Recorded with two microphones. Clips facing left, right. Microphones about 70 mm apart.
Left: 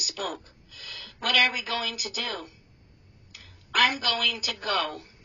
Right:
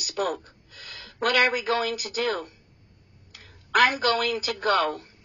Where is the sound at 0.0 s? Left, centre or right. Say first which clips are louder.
Right 6 dB; right.